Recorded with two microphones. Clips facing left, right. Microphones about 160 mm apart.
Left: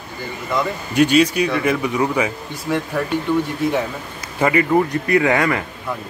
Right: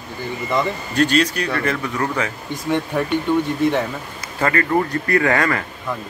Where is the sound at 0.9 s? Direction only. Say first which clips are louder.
Left 4 dB; 10° left (ahead or behind).